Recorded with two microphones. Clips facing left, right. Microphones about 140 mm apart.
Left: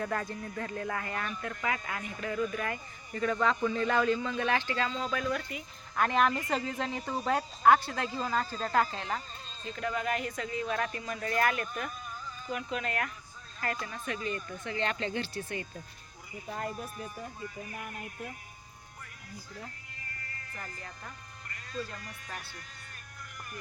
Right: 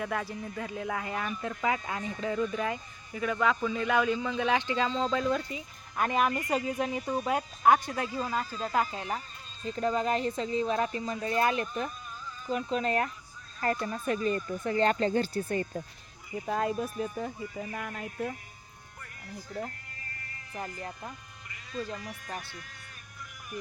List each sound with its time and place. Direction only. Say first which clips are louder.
0.0 s speech: right 1 dB; 5° right (ahead or behind)
1.4 s speech: right 4 dB; 20° right (ahead or behind)
3.1 s speech: right 1 dB; 5° right (ahead or behind)
8.0 s speech: right 1 dB; 25° left (ahead or behind)
8.7 s speech: left 1 dB; 15° right (ahead or behind)
9.6 s speech: right 5 dB; 30° right (ahead or behind); by 15.8 s 45° right (ahead or behind)
16.5 s speech: right 7 dB; 90° right
21.5 s speech: right 3 dB; 5° right (ahead or behind)